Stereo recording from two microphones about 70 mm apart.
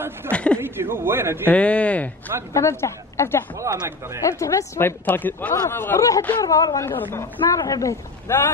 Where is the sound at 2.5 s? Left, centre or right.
Left.